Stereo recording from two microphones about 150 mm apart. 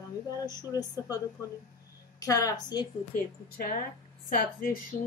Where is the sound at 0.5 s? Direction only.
25° left (ahead or behind).